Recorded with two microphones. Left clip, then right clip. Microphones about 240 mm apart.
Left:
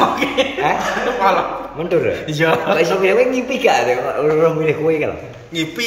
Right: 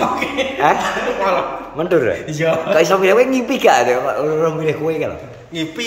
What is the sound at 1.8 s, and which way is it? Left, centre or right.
Speech, centre.